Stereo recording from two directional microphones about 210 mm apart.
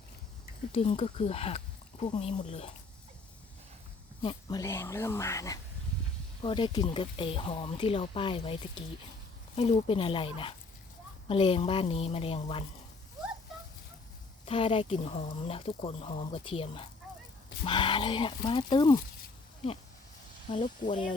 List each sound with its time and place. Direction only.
0.7 s speech: 30° left (ahead or behind)
4.2 s speech: 20° left (ahead or behind)
9.6 s speech: 30° left (ahead or behind)
14.4 s speech: 25° left (ahead or behind)
20.5 s speech: 40° left (ahead or behind)